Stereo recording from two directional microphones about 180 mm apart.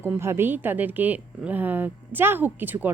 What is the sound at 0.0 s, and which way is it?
Speech, 15° right (ahead or behind).